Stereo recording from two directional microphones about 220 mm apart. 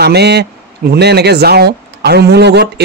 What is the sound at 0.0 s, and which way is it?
Speech, 50° right (ahead or behind).